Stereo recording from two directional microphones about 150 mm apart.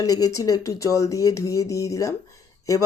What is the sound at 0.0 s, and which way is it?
Speech, 25° left (ahead or behind).